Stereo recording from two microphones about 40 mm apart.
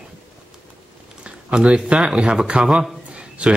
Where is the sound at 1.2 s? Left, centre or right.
Right.